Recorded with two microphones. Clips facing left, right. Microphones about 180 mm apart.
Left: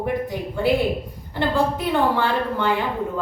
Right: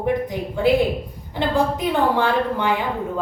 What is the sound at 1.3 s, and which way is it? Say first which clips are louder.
A woman's voice: right 1 dB; 15° right (ahead or behind).